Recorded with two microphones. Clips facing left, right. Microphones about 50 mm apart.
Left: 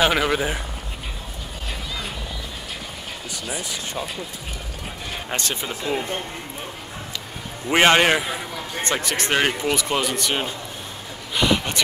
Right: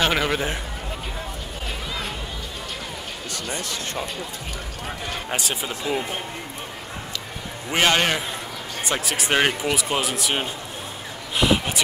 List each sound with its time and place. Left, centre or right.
0.0 s speech: centre
3.4 s speech: centre
5.3 s speech: centre
7.7 s a man's voice: left
8.9 s speech: centre
11.3 s a sound: centre